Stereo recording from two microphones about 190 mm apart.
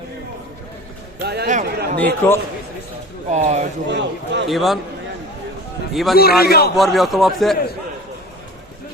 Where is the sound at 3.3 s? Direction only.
35° right (ahead or behind).